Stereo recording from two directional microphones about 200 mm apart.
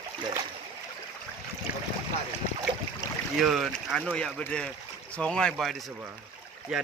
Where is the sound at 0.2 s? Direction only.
25° right (ahead or behind).